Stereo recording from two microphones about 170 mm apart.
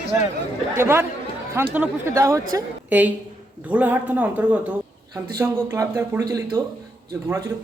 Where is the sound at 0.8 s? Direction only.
15° right (ahead or behind).